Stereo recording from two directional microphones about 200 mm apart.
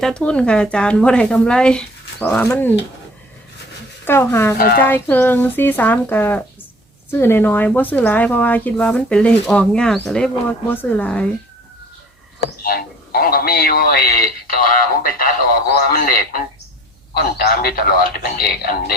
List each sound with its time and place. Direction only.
0.0 s speech: 5° left (ahead or behind)
4.0 s speech: 10° left (ahead or behind)
4.5 s speech: 50° left (ahead or behind)
5.0 s speech: 10° left (ahead or behind)
12.6 s speech: 50° left (ahead or behind)
17.2 s speech: 50° left (ahead or behind)